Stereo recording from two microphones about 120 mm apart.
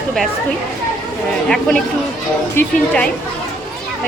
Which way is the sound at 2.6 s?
20° left (ahead or behind).